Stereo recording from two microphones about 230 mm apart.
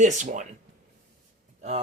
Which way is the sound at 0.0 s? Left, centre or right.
Right.